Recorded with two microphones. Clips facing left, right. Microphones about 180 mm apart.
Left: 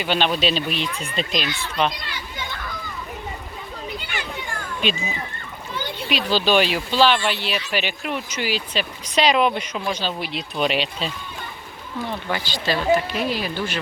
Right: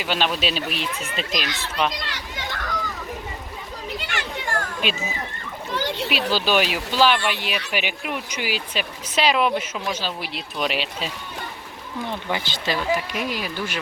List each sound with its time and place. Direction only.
0.0 s speech: 5° right (ahead or behind)
1.5 s a child's voice: 85° right
1.9 s children playing: 90° right
4.0 s a sound: 80° right
4.8 s speech: 5° right (ahead or behind)
5.7 s splash: 90° right
6.1 s speech: 5° right (ahead or behind)
12.0 s speech: 20° right (ahead or behind)